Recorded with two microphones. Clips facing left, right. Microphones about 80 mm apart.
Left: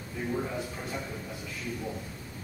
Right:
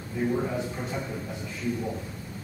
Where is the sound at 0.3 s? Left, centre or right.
Centre.